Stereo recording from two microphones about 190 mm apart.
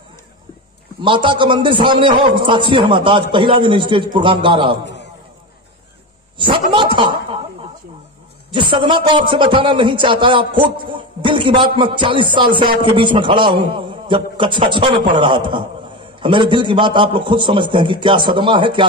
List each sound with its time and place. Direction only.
1.0 s a man's voice: 25° right (ahead or behind)
6.3 s a sound: 25° right (ahead or behind)
8.5 s a man's voice: 25° right (ahead or behind)